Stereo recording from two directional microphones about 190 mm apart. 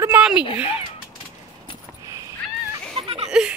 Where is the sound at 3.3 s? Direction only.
5° right (ahead or behind).